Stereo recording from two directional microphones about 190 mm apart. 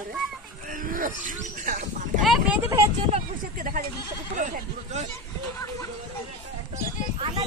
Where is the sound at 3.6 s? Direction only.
45° right (ahead or behind).